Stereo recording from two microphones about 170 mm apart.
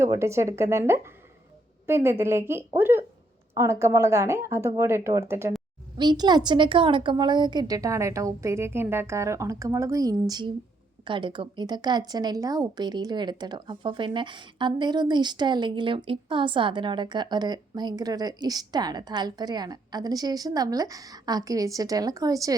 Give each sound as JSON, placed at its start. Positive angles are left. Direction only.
{"t": 0.0, "sound": "a woman's voice", "side_deg": -15}